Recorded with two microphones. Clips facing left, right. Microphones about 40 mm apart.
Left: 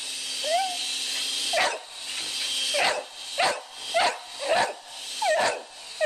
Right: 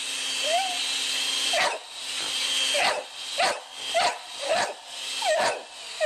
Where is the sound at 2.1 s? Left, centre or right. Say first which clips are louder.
Right 3 dB; right.